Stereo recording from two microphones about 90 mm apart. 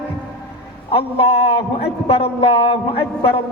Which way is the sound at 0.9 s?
90° left.